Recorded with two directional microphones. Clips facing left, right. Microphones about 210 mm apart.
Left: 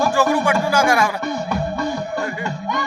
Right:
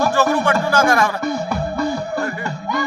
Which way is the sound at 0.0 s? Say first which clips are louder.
Even; 10° left (ahead or behind).